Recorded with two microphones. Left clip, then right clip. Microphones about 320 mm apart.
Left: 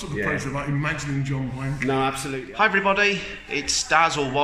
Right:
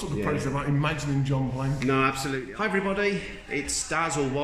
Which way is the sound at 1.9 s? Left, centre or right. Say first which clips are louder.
Left 1 dB; centre.